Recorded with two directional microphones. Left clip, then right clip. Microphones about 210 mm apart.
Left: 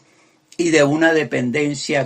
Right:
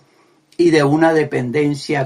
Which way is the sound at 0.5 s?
35° left (ahead or behind).